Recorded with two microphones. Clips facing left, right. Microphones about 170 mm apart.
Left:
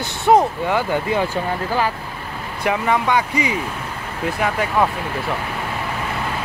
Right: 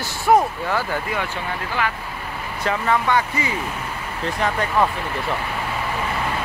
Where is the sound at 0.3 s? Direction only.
20° left (ahead or behind).